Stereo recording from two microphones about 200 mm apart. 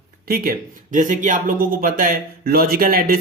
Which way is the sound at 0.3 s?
45° right (ahead or behind).